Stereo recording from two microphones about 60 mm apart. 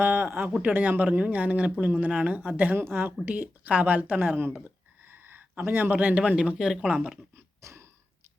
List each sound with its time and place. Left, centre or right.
0.0 s speech: right
2.7 s a woman's voice: right; by 7.1 s centre
7.6 s a sound: right